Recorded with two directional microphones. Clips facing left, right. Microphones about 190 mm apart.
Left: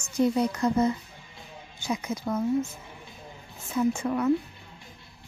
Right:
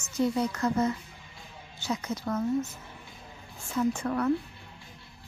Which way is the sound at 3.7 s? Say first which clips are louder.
Left 2 dB; 10° left (ahead or behind).